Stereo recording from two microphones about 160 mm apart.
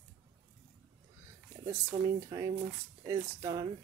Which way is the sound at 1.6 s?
15° right (ahead or behind).